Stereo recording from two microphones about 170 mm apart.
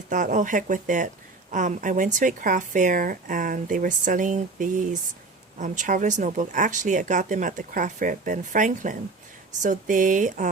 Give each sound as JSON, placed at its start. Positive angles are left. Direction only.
{"t": 0.1, "sound": "speech", "side_deg": -50}